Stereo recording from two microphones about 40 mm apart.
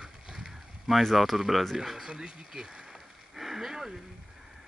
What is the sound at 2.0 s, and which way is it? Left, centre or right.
Speech, centre.